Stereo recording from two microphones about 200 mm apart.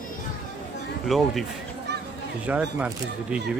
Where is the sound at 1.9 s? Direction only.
55° right (ahead or behind).